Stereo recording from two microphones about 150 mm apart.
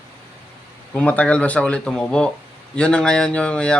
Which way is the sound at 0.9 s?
10° left (ahead or behind).